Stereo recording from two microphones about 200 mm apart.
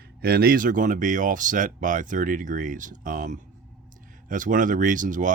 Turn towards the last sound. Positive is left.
turn(degrees=-40)  # may be behind; listen again after turning